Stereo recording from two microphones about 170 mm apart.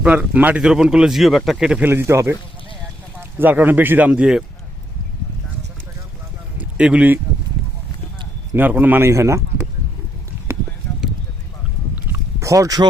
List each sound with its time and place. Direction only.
0.0 s speech: 10° right (ahead or behind)
6.6 s speech: 5° right (ahead or behind)
8.5 s speech: 10° right (ahead or behind)
12.1 s a sound: 20° right (ahead or behind)